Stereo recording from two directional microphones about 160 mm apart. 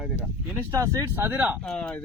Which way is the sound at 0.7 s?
20° right (ahead or behind).